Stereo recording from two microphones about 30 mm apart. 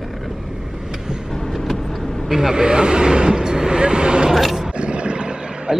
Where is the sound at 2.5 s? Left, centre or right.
Right.